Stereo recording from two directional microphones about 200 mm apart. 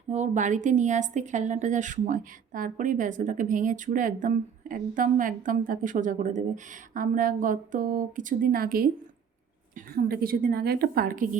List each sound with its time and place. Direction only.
0.1 s a woman's voice: 35° right (ahead or behind)